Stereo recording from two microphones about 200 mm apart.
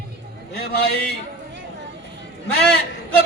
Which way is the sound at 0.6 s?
50° left (ahead or behind).